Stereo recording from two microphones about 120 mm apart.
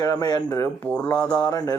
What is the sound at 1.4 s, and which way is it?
Speech, 35° left (ahead or behind).